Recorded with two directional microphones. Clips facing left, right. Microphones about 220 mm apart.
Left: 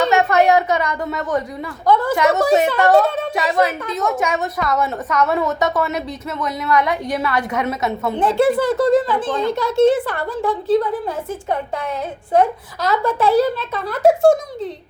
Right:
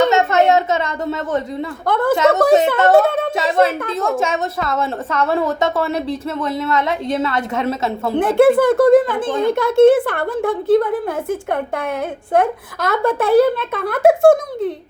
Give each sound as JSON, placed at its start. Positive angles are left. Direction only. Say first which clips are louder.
{"t": 0.0, "sound": "a sound", "louder": "right 1 dB", "side_deg": -20}
{"t": 1.9, "sound": "a woman's voice", "louder": "even", "side_deg": -55}
{"t": 2.1, "sound": "a woman's voice", "louder": "right 7 dB", "side_deg": -25}
{"t": 8.2, "sound": "a child's voice", "louder": "right 4 dB", "side_deg": -55}